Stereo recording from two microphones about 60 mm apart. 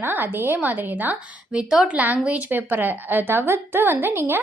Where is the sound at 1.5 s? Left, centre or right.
Centre.